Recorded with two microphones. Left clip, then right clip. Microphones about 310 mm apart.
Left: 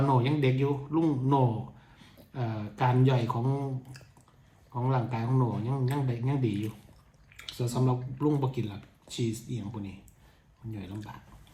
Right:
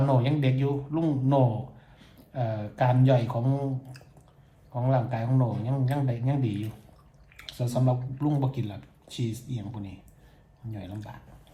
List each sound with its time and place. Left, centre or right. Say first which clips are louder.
0.1 s speech: even; centre